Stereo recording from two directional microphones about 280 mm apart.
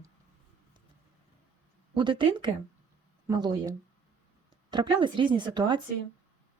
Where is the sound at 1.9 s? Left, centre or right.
Centre.